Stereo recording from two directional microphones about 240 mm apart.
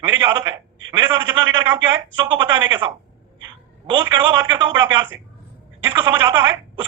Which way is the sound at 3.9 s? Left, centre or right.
Centre.